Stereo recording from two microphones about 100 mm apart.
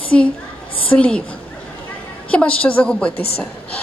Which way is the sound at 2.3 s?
15° left (ahead or behind).